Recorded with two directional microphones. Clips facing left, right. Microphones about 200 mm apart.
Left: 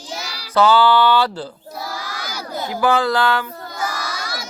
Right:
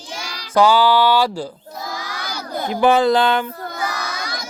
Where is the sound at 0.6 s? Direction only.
10° right (ahead or behind).